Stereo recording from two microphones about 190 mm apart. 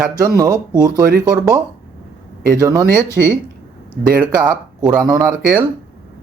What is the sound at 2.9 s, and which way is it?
Speech, 15° left (ahead or behind).